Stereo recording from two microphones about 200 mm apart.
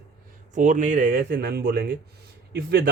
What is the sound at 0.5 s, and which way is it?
Speech, 35° right (ahead or behind).